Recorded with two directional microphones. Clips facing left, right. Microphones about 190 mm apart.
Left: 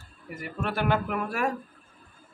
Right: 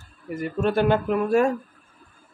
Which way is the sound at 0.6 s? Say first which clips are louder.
Right 6 dB; 25° right (ahead or behind).